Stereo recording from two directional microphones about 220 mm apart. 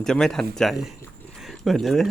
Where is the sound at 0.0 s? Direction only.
Centre (ahead or behind).